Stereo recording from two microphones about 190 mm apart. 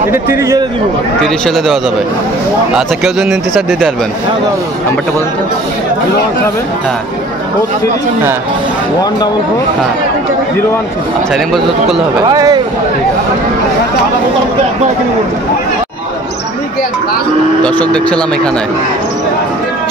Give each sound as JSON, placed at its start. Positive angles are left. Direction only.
{"t": 0.4, "sound": "a man's voice", "side_deg": -15}
{"t": 1.2, "sound": "speech", "side_deg": 0}
{"t": 12.3, "sound": "speech", "side_deg": -20}
{"t": 17.6, "sound": "speech", "side_deg": 5}